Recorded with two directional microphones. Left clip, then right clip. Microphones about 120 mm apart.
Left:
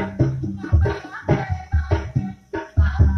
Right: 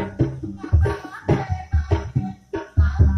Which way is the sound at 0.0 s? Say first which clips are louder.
Left 1 dB; 15° left (ahead or behind).